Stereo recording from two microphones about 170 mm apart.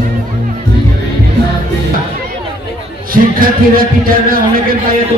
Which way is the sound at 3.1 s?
60° right (ahead or behind).